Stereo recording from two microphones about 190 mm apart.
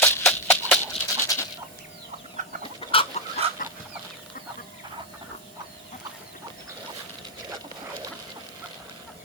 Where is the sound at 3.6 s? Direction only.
45° left (ahead or behind).